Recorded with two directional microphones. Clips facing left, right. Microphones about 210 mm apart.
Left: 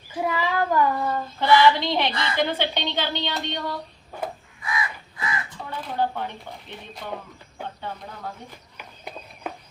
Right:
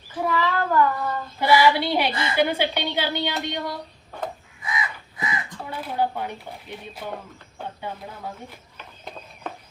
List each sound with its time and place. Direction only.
0.1 s child singing: 15° left (ahead or behind)
1.4 s a woman's voice: 10° right (ahead or behind)
4.6 s crow: 20° right (ahead or behind)
5.8 s a woman's voice: 10° right (ahead or behind)
8.8 s a sound: 10° left (ahead or behind)